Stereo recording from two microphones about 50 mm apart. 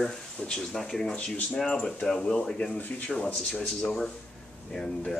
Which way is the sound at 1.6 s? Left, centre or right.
Centre.